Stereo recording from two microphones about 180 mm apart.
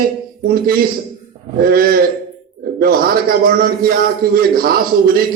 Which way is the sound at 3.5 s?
55° right (ahead or behind).